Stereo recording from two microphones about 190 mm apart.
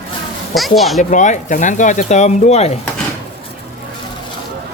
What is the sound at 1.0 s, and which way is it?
Speech, 40° left (ahead or behind).